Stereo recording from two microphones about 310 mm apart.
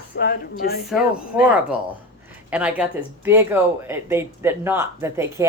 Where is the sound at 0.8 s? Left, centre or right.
Centre.